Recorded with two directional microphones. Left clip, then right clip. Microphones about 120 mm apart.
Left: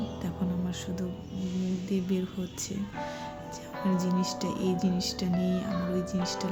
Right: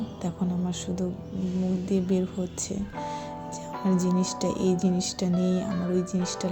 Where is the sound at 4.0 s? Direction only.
25° right (ahead or behind).